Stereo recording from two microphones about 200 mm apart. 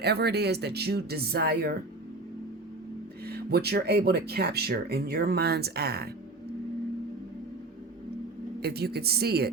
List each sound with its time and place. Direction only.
0.0 s speech: 55° right (ahead or behind)
3.2 s speech: 50° right (ahead or behind)
8.6 s speech: 55° right (ahead or behind)